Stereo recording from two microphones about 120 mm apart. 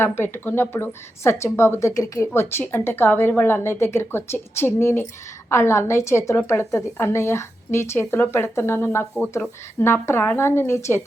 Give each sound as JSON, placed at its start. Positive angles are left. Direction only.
{"t": 0.0, "sound": "speech", "side_deg": 20}